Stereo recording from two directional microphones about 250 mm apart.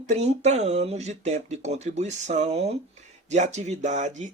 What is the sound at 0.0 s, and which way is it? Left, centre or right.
Speech, right.